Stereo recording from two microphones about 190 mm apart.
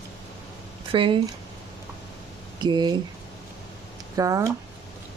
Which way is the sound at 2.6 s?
25° right (ahead or behind).